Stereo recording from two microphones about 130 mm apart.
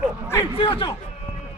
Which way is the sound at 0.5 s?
45° left (ahead or behind).